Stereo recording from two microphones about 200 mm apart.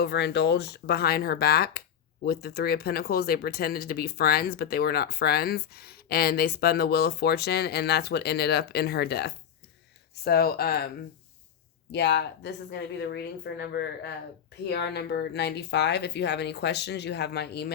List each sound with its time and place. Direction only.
0.0 s speech: 55° left (ahead or behind)
11.9 s speech: 60° left (ahead or behind)